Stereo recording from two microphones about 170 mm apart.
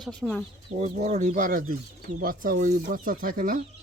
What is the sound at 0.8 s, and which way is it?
Speech, 45° right (ahead or behind).